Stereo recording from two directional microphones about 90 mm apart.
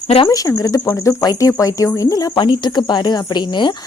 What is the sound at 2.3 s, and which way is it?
Speech, 60° left (ahead or behind).